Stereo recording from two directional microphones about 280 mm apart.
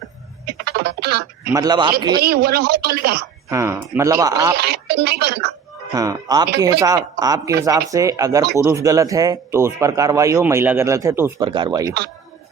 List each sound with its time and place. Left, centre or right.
0.6 s music: right
1.5 s speech: centre
2.2 s speech: right
3.5 s speech: centre
4.5 s speech: right
5.9 s speech: centre